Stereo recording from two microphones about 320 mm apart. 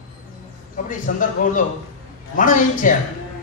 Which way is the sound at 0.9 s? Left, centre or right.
Left.